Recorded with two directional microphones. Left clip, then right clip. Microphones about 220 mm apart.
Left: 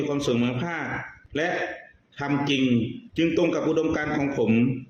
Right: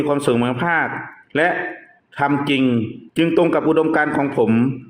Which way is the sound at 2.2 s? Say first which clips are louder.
Right 7 dB; 15° right (ahead or behind).